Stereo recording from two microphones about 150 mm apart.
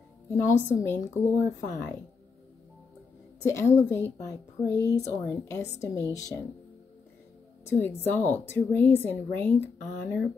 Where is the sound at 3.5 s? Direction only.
20° left (ahead or behind).